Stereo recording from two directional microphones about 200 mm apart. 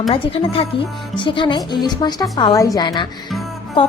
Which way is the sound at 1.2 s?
25° left (ahead or behind).